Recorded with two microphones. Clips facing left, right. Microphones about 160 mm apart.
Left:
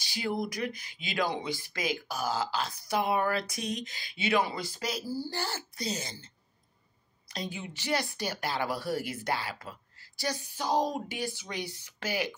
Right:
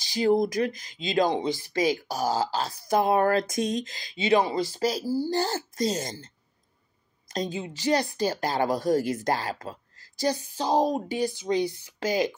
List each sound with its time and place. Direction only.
0.1 s speech: 40° right (ahead or behind)
1.2 s speech: 20° right (ahead or behind)
1.6 s speech: 35° right (ahead or behind)
7.2 s a sound: 45° right (ahead or behind)
7.8 s speech: 40° right (ahead or behind)
10.5 s speech: 25° right (ahead or behind)
11.0 s speech: 35° right (ahead or behind)
11.3 s speech: 25° right (ahead or behind)